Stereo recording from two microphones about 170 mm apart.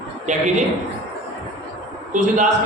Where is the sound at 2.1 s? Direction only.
45° right (ahead or behind).